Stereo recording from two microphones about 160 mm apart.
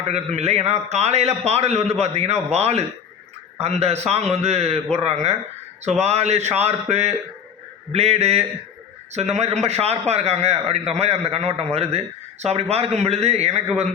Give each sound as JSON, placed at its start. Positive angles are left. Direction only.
{"t": 0.0, "sound": "a man's voice", "side_deg": -40}